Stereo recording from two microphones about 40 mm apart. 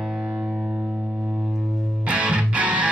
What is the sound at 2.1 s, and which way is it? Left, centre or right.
Music, right.